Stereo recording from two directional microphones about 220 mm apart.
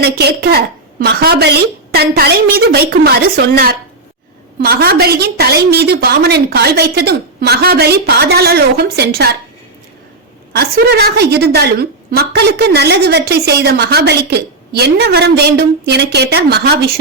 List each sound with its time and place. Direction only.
0.0 s a woman's voice: 45° right (ahead or behind)
10.5 s a woman's voice: 45° right (ahead or behind)